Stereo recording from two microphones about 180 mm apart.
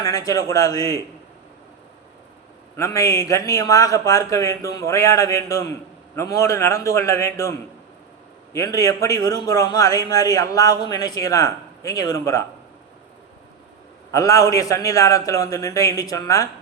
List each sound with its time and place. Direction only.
0.0 s a man's voice: 20° left (ahead or behind)
2.7 s a man's voice: 15° left (ahead or behind)
8.5 s a man's voice: 20° left (ahead or behind)
14.1 s a man's voice: 20° left (ahead or behind)